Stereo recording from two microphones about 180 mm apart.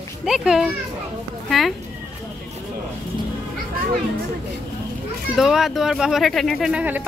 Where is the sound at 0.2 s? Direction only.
Centre (ahead or behind).